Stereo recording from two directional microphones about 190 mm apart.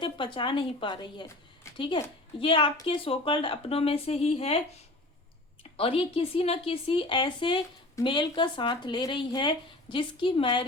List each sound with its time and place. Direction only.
0.0 s speech: 25° left (ahead or behind)
5.7 s speech: 30° left (ahead or behind)